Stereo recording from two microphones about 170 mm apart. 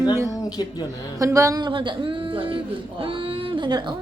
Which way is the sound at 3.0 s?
30° right (ahead or behind).